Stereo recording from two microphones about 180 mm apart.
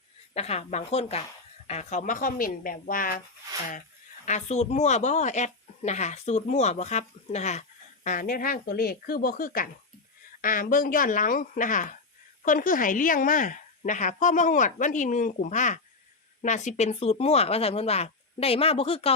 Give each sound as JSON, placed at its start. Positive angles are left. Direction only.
{"t": 0.3, "sound": "a woman's voice", "side_deg": 35}
{"t": 4.3, "sound": "a woman's voice", "side_deg": 40}